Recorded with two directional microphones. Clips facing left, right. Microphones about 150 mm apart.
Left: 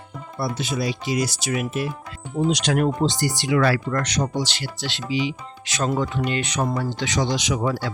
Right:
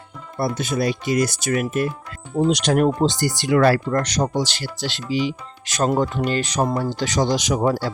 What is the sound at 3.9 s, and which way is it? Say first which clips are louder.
Speech: right 3 dB; 35° right (ahead or behind).